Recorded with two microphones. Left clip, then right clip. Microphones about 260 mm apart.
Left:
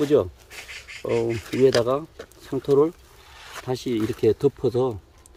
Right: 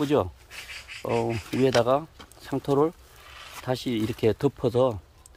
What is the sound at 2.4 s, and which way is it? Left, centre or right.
Speech, centre.